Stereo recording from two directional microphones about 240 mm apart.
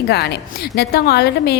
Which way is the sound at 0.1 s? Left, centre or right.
Left.